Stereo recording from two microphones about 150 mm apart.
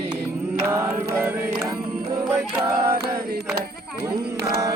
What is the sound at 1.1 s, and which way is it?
Chant, 15° right (ahead or behind).